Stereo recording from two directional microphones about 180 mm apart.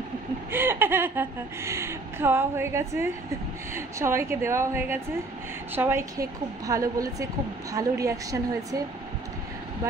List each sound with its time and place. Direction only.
0.5 s a woman's voice: 10° right (ahead or behind)